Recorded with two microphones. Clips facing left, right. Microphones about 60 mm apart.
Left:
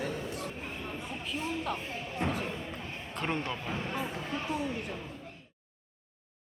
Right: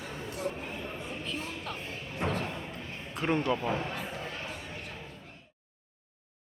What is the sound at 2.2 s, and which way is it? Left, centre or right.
Slam, centre.